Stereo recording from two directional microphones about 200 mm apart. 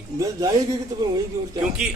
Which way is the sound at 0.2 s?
15° right (ahead or behind).